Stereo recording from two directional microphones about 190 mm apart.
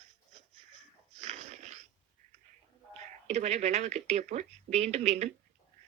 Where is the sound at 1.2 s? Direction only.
35° right (ahead or behind).